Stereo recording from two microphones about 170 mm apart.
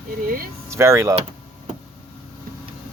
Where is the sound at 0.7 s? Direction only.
15° right (ahead or behind).